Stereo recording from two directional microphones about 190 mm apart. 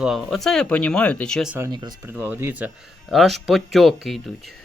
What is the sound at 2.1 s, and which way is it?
Speech, 10° right (ahead or behind).